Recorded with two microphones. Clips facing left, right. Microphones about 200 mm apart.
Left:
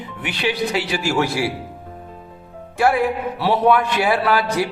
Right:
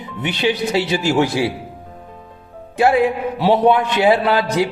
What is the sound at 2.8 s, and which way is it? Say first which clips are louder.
A man's voice: right 3 dB; 20° right (ahead or behind).